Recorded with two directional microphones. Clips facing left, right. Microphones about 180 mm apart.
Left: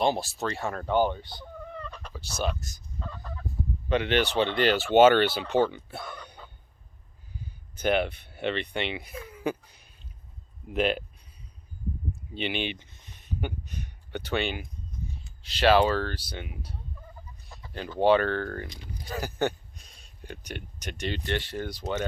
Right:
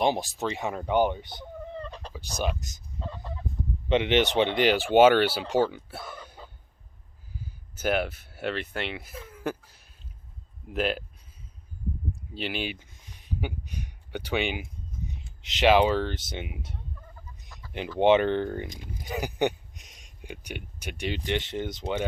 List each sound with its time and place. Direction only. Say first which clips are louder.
0.0 s speech: right 1 dB; 15° right (ahead or behind); by 2.1 s 30° right (ahead or behind)
2.1 s speech: even; 15° right (ahead or behind)
12.3 s a sound: left 2 dB; 5° right (ahead or behind)
15.4 s speech: right 1 dB; 20° right (ahead or behind)
17.7 s a sound: right 2 dB; 15° right (ahead or behind)
18.0 s speech: right 2 dB; 20° right (ahead or behind)